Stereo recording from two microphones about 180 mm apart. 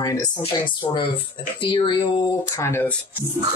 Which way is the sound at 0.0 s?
20° left (ahead or behind).